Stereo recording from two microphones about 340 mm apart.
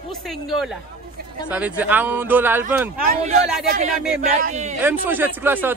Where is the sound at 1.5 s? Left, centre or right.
Centre.